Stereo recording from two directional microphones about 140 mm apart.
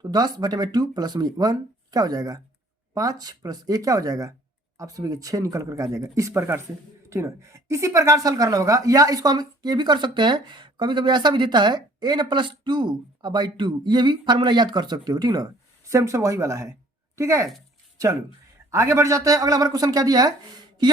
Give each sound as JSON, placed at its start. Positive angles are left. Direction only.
{"t": 0.0, "sound": "speech", "side_deg": -30}
{"t": 18.7, "sound": "speech", "side_deg": -20}